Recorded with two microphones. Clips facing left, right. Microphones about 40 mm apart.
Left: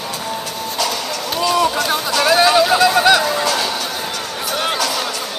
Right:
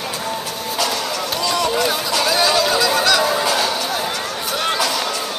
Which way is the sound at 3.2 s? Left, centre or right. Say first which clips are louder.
Even; centre.